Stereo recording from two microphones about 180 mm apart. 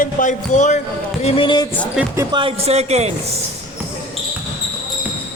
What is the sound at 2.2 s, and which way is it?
Speech, 25° right (ahead or behind).